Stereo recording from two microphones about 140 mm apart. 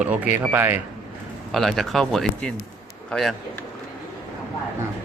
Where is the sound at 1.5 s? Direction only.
Centre (ahead or behind).